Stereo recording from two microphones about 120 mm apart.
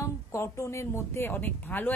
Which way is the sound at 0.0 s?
25° left (ahead or behind).